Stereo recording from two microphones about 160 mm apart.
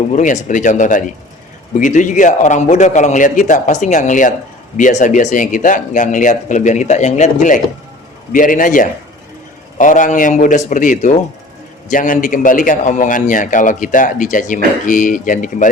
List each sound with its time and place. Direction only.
0.1 s a man's voice: 50° left (ahead or behind)